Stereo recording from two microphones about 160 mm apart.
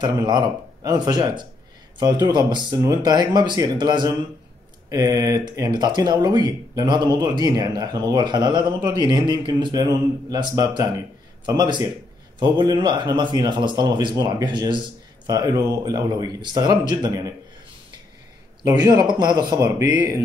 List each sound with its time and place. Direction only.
0.0 s speech: 25° right (ahead or behind)
18.6 s speech: 20° right (ahead or behind)